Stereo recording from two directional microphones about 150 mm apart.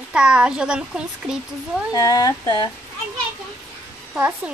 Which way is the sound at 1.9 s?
25° left (ahead or behind).